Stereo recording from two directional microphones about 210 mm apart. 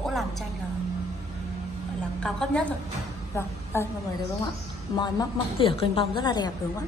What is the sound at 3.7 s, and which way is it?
Speech, 10° left (ahead or behind).